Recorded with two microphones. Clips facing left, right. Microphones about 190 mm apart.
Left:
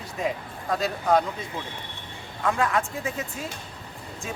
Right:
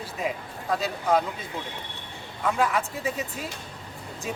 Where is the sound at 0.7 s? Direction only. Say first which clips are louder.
Left 1 dB; centre (ahead or behind).